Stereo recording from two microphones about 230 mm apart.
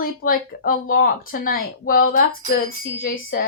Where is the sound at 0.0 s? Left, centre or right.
Left.